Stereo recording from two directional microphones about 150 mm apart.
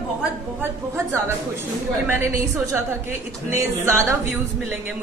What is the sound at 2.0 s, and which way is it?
A woman's voice, 15° right (ahead or behind).